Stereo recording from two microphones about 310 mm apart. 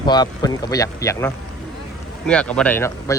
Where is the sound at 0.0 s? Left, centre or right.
Centre.